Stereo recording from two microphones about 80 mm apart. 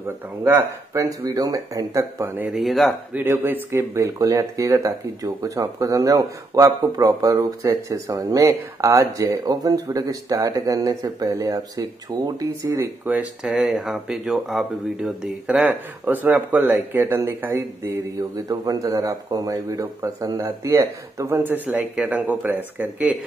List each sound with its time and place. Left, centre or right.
0.9 s speech: right
2.5 s speech: centre
3.4 s speech: right
4.2 s speech: right
13.0 s speech: centre
13.4 s speech: centre
15.4 s speech: centre
18.5 s speech: right
21.4 s speech: right